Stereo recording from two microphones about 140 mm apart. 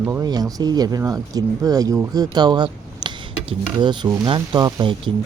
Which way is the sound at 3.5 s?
35° right (ahead or behind).